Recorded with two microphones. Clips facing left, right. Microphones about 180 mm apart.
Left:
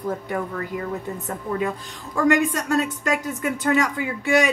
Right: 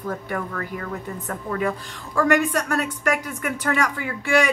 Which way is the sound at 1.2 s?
20° left (ahead or behind).